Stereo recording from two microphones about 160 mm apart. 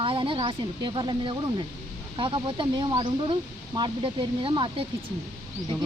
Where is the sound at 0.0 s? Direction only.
35° right (ahead or behind).